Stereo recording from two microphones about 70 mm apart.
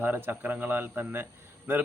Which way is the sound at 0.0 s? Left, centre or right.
Right.